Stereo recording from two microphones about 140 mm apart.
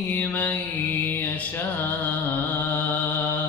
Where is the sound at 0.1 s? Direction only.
15° left (ahead or behind).